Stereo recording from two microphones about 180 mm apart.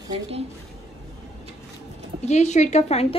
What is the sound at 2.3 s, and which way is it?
Speech, 40° left (ahead or behind).